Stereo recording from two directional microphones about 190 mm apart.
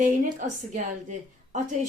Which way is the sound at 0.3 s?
40° right (ahead or behind).